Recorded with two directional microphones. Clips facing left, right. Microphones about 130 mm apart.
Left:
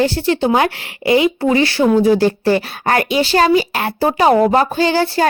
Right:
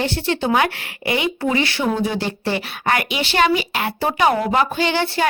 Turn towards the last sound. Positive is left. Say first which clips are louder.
# left 5 dB
turn(degrees=40)  # may be behind; listen again after turning